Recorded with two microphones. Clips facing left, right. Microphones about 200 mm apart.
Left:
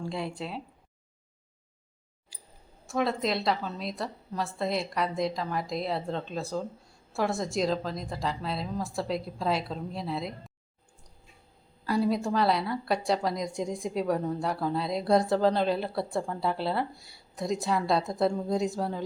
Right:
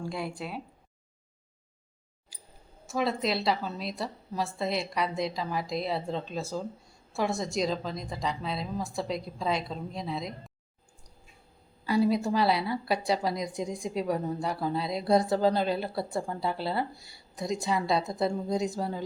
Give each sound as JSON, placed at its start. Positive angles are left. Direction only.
{"t": 0.0, "sound": "a woman's voice", "side_deg": -5}
{"t": 2.8, "sound": "a woman's voice", "side_deg": 0}
{"t": 11.9, "sound": "a woman's voice", "side_deg": 0}